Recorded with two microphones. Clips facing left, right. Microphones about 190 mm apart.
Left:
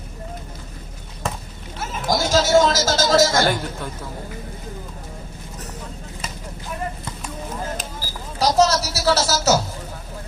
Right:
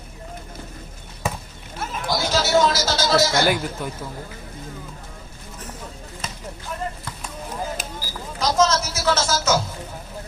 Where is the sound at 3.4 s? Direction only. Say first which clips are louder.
Even; 10° right (ahead or behind).